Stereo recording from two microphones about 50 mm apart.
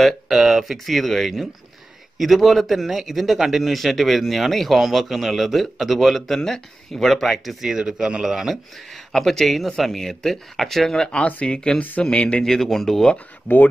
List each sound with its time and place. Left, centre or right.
0.0 s a man's voice: centre
7.6 s speech: centre
8.9 s a man's voice: centre; by 12.4 s left
12.4 s speech: centre